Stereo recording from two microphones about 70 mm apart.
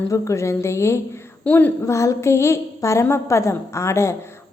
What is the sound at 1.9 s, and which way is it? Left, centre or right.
A woman's voice, left.